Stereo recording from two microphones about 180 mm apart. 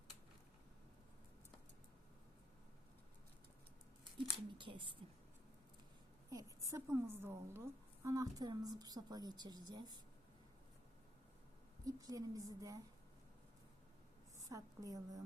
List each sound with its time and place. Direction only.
4.5 s a woman's voice: 30° right (ahead or behind)
6.3 s a woman's voice: 20° right (ahead or behind)
11.9 s a woman's voice: 20° right (ahead or behind)
14.3 s a woman's voice: 20° right (ahead or behind)